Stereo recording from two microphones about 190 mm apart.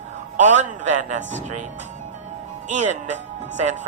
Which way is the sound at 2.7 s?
40° right (ahead or behind).